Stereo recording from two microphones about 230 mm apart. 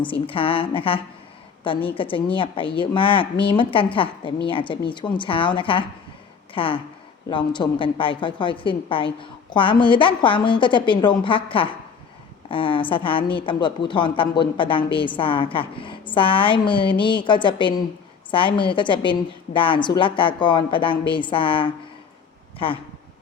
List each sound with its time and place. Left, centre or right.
0.0 s a woman's voice: left